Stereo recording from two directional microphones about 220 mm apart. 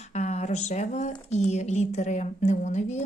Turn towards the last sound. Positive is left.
turn(degrees=30)  # may be behind; listen again after turning